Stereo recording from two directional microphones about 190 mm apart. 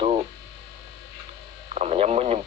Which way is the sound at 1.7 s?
35° right (ahead or behind).